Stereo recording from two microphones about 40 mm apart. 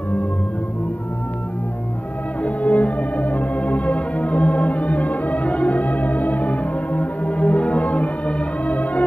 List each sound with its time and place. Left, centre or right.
2.4 s music: left